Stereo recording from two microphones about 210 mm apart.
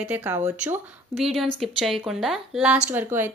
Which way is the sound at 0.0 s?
10° right (ahead or behind).